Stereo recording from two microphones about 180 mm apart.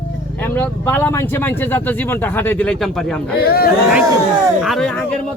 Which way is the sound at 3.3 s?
60° left (ahead or behind).